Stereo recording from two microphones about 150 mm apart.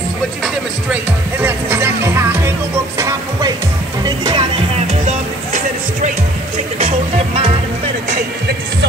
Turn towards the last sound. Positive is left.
turn(degrees=-40)  # may be behind; listen again after turning